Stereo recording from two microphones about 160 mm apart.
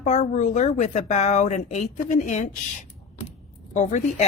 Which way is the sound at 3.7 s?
45° left (ahead or behind).